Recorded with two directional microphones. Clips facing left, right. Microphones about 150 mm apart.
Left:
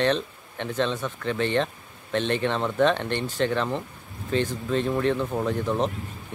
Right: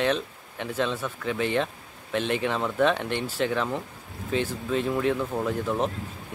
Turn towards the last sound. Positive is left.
turn(degrees=-5)  # may be behind; listen again after turning